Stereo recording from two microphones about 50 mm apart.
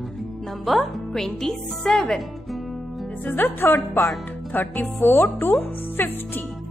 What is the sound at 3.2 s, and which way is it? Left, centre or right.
Speech, left.